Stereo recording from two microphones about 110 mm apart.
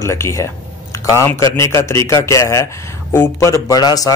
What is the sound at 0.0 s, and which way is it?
A man's voice, 25° left (ahead or behind).